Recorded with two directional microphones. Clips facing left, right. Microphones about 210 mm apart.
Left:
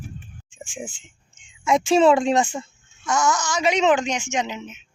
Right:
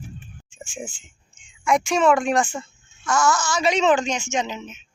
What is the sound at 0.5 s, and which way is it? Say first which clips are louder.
A child's voice: even; 15° left (ahead or behind).